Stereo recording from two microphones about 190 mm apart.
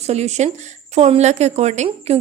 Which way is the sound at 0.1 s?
35° right (ahead or behind).